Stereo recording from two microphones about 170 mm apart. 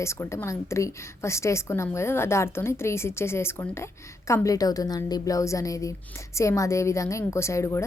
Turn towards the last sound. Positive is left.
turn(degrees=15)  # may be behind; listen again after turning